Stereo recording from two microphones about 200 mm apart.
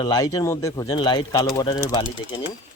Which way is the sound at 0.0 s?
20° left (ahead or behind).